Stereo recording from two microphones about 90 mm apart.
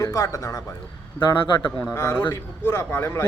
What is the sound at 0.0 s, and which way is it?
Speech, 35° left (ahead or behind).